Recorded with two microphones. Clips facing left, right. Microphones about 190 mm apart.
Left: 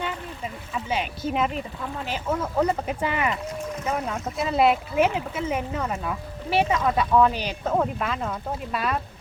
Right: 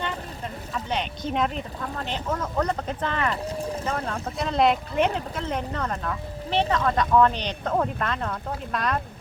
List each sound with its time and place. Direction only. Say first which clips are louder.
0.0 s speech: left 1 dB; 5° left (ahead or behind)
3.4 s boat: right 2 dB; 35° right (ahead or behind)
3.8 s speech: left 1 dB; 10° left (ahead or behind)